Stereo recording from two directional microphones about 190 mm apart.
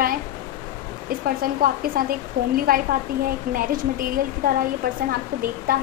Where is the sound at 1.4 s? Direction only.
50° right (ahead or behind).